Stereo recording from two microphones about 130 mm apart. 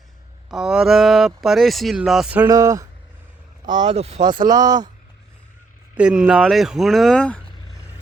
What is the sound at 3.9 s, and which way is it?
Speech, 55° right (ahead or behind).